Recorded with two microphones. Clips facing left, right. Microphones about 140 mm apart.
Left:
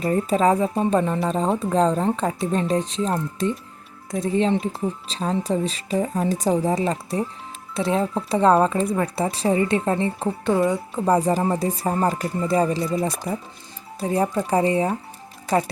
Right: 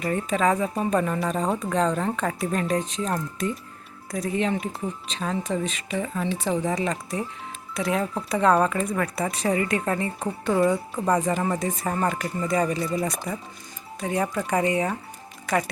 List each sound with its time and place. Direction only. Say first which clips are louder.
0.0 s speech: left 4 dB; 30° left (ahead or behind)
14.0 s speech: left 4 dB; 30° left (ahead or behind)